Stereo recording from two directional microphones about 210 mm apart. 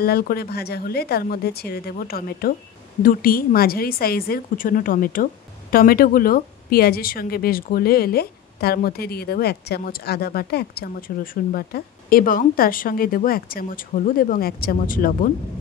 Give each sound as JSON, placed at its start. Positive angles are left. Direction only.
{"t": 0.0, "sound": "a woman's voice", "side_deg": 45}